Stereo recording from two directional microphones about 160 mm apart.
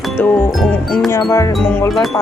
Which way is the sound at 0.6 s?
Centre (ahead or behind).